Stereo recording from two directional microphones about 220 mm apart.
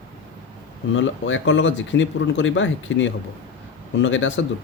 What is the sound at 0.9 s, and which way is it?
Speech, 60° left (ahead or behind).